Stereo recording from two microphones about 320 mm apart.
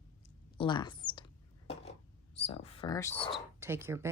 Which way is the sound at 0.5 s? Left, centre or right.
Centre.